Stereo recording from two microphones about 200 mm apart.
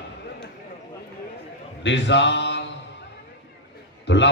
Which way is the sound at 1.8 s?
60° left (ahead or behind).